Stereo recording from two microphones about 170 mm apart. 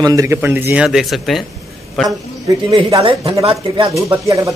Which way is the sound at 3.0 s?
30° right (ahead or behind).